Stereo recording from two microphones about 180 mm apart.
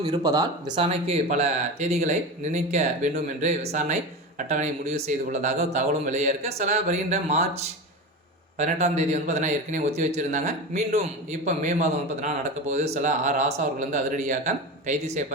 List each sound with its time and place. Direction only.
0.0 s speech: 20° right (ahead or behind)
0.8 s a man's voice: 35° right (ahead or behind)
8.5 s a man's voice: 40° right (ahead or behind)